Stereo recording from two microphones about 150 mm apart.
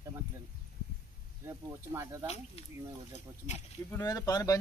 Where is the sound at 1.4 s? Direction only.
15° right (ahead or behind).